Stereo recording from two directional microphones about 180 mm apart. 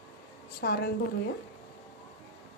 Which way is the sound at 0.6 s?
60° left (ahead or behind).